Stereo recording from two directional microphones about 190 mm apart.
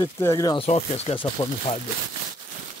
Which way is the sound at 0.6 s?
30° left (ahead or behind).